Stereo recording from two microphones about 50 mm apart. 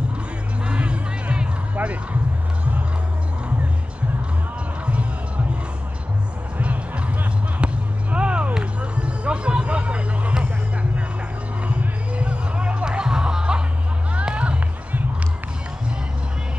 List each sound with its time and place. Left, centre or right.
0.7 s music: right
6.6 s music: right
7.5 s a sound: right
11.6 s music: right